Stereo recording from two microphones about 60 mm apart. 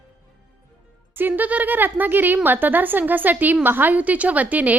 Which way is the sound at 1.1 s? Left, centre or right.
Right.